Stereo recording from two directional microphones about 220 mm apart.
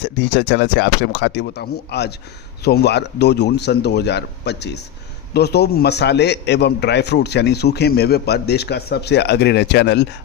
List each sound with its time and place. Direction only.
0.0 s a man's voice: 55° left (ahead or behind)